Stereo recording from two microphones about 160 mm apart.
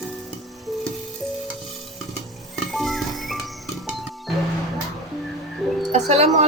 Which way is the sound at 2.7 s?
Centre (ahead or behind).